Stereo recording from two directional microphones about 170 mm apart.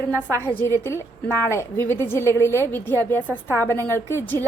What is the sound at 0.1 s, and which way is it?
Speech, 15° right (ahead or behind).